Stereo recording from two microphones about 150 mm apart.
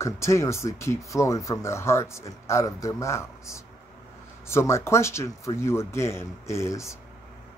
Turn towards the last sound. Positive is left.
turn(degrees=20)  # may be behind; listen again after turning